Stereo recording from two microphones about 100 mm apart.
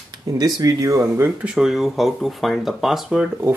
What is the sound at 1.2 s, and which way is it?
Speech, 5° right (ahead or behind).